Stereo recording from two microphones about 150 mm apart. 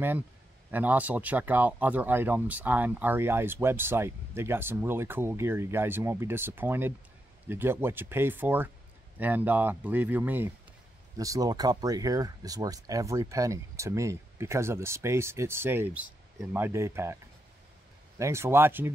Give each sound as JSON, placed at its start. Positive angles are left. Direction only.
{"t": 0.7, "sound": "speech", "side_deg": -10}
{"t": 11.1, "sound": "speech", "side_deg": -25}